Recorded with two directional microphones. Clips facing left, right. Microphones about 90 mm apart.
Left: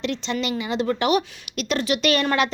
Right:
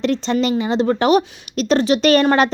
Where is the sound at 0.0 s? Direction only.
40° right (ahead or behind).